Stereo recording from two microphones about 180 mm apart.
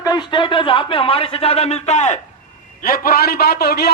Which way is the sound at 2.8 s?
55° left (ahead or behind).